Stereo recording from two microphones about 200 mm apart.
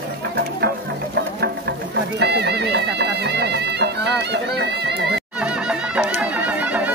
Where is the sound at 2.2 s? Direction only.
55° right (ahead or behind).